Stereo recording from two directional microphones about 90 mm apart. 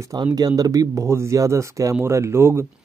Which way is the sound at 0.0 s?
45° right (ahead or behind).